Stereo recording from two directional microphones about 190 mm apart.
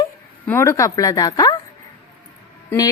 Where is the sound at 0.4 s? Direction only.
15° left (ahead or behind).